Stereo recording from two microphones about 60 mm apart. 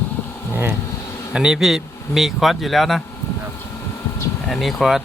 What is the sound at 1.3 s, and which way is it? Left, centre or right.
Speech, centre.